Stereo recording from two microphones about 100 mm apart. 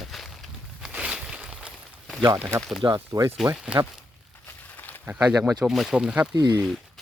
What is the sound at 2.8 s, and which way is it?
Speech, 40° right (ahead or behind).